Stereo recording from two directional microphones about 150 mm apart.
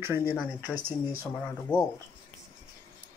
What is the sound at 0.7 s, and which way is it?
Speech, 80° right.